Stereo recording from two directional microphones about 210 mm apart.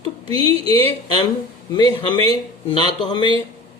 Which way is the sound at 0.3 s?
25° right (ahead or behind).